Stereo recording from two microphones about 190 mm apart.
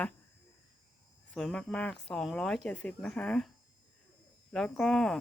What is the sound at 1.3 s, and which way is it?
Speech, 5° left (ahead or behind).